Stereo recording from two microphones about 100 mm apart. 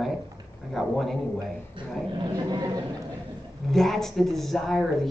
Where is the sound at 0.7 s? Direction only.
Centre (ahead or behind).